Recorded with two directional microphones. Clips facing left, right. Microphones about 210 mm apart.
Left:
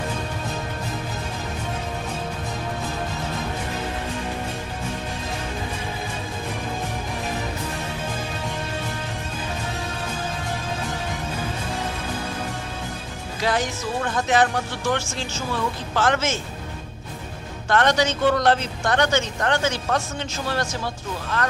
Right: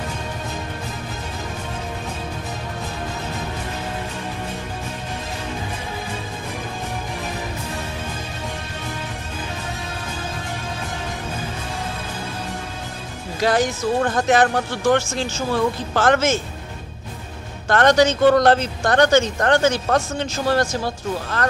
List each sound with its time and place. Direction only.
13.4 s speech: 40° right (ahead or behind)
17.6 s speech: 40° right (ahead or behind)